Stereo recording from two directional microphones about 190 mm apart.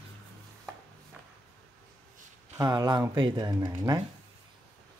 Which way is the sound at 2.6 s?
20° right (ahead or behind).